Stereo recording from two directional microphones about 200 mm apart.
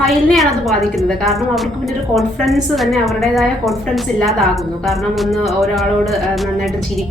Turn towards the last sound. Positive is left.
turn(degrees=0)  # may be behind; listen again after turning